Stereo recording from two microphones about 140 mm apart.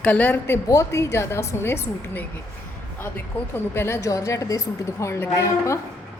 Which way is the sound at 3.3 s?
10° left (ahead or behind).